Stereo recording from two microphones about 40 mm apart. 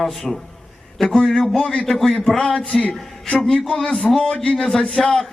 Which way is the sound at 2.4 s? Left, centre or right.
Centre.